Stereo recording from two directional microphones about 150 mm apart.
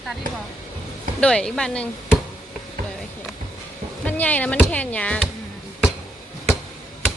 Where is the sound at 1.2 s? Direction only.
5° left (ahead or behind).